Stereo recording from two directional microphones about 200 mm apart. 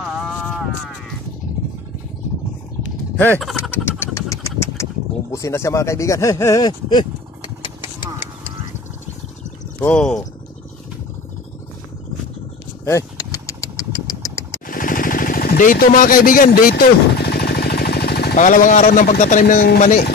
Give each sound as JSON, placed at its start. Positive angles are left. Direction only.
{"t": 0.0, "sound": "a sound", "side_deg": 0}
{"t": 3.2, "sound": "speech", "side_deg": 5}
{"t": 4.0, "sound": "engine", "side_deg": 15}
{"t": 5.3, "sound": "speech", "side_deg": 15}
{"t": 7.6, "sound": "engine", "side_deg": 25}
{"t": 9.8, "sound": "speech", "side_deg": 5}
{"t": 12.8, "sound": "vehicle", "side_deg": 15}
{"t": 14.7, "sound": "jackhammer", "side_deg": 45}